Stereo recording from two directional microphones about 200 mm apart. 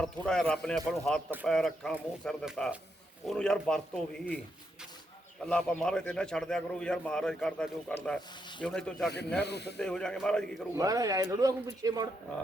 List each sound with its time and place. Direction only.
0.0 s speech: 5° left (ahead or behind)
5.5 s speech: 5° left (ahead or behind)
9.4 s speech: 55° left (ahead or behind)
9.7 s speech: 5° left (ahead or behind)
10.8 s speech: 15° right (ahead or behind)